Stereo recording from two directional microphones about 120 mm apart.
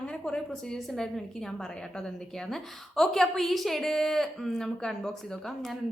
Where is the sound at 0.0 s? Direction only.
5° left (ahead or behind).